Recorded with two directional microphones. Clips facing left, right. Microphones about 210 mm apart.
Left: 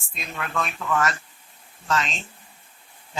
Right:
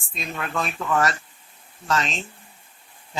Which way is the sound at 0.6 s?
35° right (ahead or behind).